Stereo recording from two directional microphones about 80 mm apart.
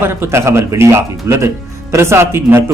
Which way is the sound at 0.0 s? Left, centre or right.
Right.